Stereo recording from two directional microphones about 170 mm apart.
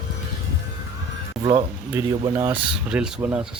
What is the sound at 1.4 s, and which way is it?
Speech, 25° right (ahead or behind).